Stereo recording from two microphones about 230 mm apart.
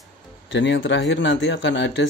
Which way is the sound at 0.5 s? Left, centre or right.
Left.